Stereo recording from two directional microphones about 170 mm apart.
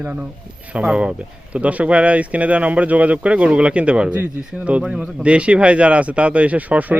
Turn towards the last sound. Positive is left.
turn(degrees=-10)  # may be behind; listen again after turning